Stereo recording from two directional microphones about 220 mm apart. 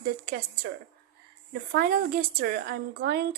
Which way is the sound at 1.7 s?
45° right (ahead or behind).